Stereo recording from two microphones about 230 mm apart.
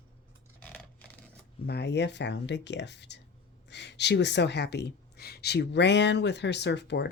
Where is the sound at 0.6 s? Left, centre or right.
Centre.